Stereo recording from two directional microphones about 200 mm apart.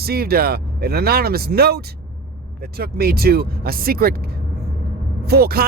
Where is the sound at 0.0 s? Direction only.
50° right (ahead or behind).